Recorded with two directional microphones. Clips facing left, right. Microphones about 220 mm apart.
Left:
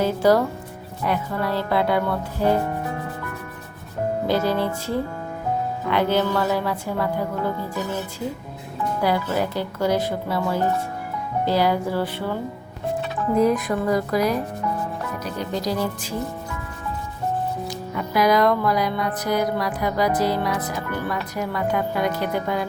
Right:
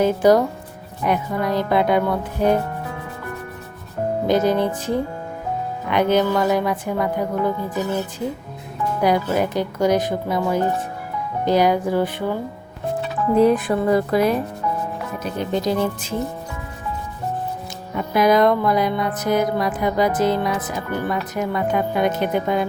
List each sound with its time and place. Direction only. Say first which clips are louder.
0.0 s music: right 3 dB; 20° right (ahead or behind)
1.0 s speech: right 3 dB; 20° right (ahead or behind)
4.3 s music: right 5 dB; 20° right (ahead or behind)
5.9 s speech: right 3 dB; 20° right (ahead or behind)
9.0 s speech: right 4 dB; 20° right (ahead or behind)
13.3 s music: right 4 dB; 30° right (ahead or behind)
17.9 s music: right 3 dB; 25° right (ahead or behind)